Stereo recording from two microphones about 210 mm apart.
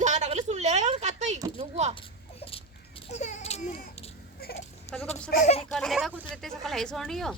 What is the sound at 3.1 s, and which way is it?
Baby cry, 35° left (ahead or behind).